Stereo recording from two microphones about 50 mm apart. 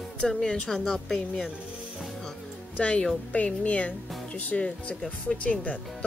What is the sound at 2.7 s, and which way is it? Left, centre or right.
Speech, left.